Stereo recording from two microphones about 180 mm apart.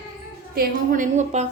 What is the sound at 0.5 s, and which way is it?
Speech, 45° right (ahead or behind).